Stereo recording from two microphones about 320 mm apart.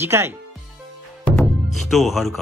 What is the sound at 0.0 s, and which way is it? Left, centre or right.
A man's voice, centre.